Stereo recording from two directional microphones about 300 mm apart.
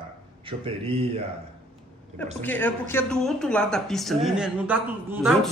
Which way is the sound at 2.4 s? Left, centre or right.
Centre.